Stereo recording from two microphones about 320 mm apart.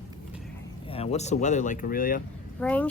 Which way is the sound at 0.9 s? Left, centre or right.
Centre.